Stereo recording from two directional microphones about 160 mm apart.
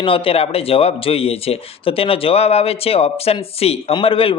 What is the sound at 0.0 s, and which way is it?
Speech, 35° left (ahead or behind).